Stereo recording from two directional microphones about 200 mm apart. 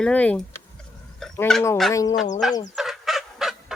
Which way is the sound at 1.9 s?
15° left (ahead or behind).